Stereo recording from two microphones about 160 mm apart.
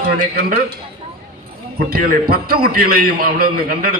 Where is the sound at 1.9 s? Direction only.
65° right (ahead or behind).